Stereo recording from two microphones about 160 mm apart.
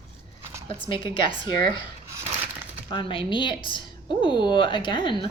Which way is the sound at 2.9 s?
30° left (ahead or behind).